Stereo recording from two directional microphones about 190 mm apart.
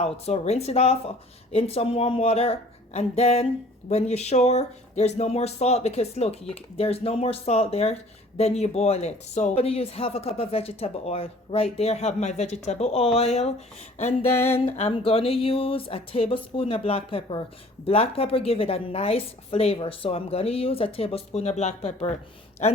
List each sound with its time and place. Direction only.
0.0 s speech: 35° left (ahead or behind)
14.3 s a sound: 10° left (ahead or behind)
14.8 s speech: 30° left (ahead or behind)